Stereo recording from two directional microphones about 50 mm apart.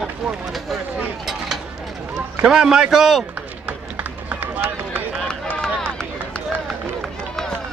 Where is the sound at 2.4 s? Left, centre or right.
Centre.